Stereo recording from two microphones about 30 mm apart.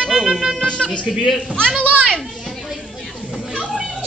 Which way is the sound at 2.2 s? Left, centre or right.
Centre.